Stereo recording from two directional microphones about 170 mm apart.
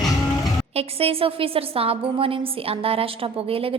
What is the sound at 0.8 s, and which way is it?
A woman's voice, 35° right (ahead or behind).